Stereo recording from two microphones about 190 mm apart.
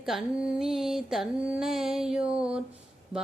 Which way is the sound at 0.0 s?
Centre (ahead or behind).